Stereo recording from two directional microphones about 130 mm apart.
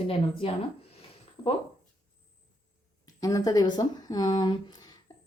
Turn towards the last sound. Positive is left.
turn(degrees=30)  # may be behind; listen again after turning